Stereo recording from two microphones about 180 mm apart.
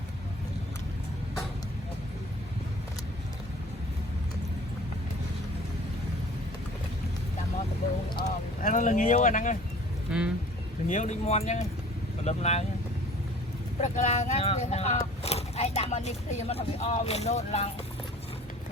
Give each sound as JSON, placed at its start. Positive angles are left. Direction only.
{"t": 8.2, "sound": "vehicle", "side_deg": 45}
{"t": 10.1, "sound": "speech", "side_deg": -5}
{"t": 10.8, "sound": "speech", "side_deg": 40}
{"t": 13.8, "sound": "speech", "side_deg": 40}